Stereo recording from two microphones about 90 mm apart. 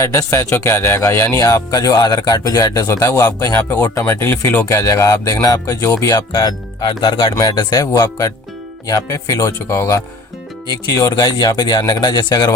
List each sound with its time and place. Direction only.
0.0 s speech: 35° left (ahead or behind)
2.8 s speech: 30° left (ahead or behind)
3.5 s speech: 20° left (ahead or behind)
6.1 s speech: 50° left (ahead or behind)
7.3 s speech: 45° left (ahead or behind)
10.9 s speech: 45° left (ahead or behind)